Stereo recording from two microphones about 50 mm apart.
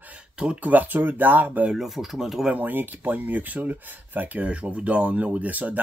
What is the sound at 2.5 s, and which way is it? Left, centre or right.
Speech, right.